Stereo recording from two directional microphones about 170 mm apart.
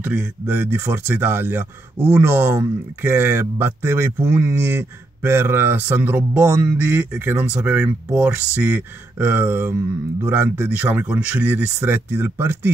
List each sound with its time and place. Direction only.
0.0 s speech: 10° right (ahead or behind)